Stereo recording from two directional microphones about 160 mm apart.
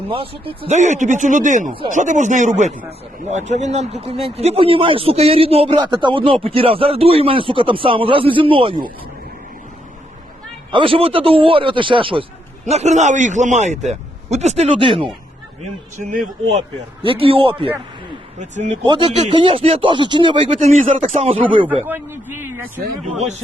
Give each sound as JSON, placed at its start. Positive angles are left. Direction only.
{"t": 0.1, "sound": "speech", "side_deg": -35}
{"t": 0.8, "sound": "a man's voice", "side_deg": -50}
{"t": 10.7, "sound": "speech", "side_deg": -30}
{"t": 12.6, "sound": "a man's voice", "side_deg": -45}
{"t": 15.6, "sound": "a man's voice", "side_deg": -50}
{"t": 16.6, "sound": "speech", "side_deg": -35}
{"t": 18.3, "sound": "a man's voice", "side_deg": -50}
{"t": 18.8, "sound": "speech", "side_deg": -30}
{"t": 20.5, "sound": "speech", "side_deg": -50}
{"t": 21.8, "sound": "a man's voice", "side_deg": -15}